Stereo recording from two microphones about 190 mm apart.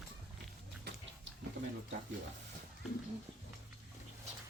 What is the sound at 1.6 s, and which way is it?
Speech, 75° right (ahead or behind).